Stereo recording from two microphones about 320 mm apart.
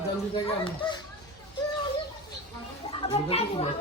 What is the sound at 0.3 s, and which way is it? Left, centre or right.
Speech, centre.